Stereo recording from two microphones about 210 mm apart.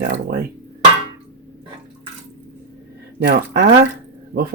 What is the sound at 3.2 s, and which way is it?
Speech, 50° right (ahead or behind).